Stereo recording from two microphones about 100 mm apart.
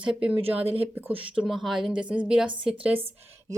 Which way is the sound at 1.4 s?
Centre (ahead or behind).